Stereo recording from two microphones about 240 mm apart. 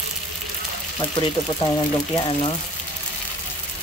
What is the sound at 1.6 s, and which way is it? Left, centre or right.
Speech, centre.